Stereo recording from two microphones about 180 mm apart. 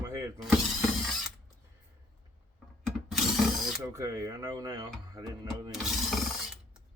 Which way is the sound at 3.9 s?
15° right (ahead or behind).